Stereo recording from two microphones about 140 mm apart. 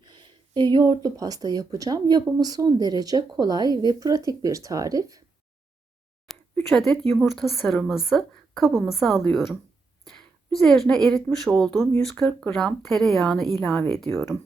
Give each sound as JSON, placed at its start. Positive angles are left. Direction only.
{"t": 0.0, "sound": "speech", "side_deg": -30}
{"t": 6.3, "sound": "a sound", "side_deg": 0}
{"t": 6.7, "sound": "a woman's voice", "side_deg": 0}